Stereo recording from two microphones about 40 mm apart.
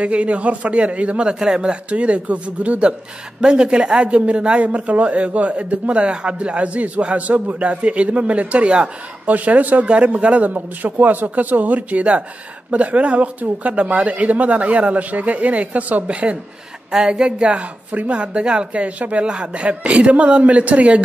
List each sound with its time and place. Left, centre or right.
0.0 s speech: right
1.4 s speech: centre
1.9 s speech: right
9.3 s speech: right
10.5 s speech: right
19.2 s speech: right